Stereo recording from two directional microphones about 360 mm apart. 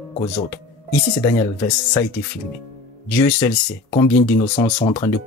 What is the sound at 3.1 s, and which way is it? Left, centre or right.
Speech, centre.